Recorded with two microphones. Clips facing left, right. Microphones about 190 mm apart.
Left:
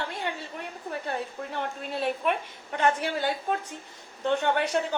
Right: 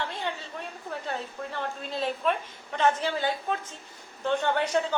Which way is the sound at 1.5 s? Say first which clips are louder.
Left 1 dB; 15° left (ahead or behind).